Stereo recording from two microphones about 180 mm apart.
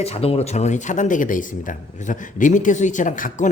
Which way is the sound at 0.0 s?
35° left (ahead or behind).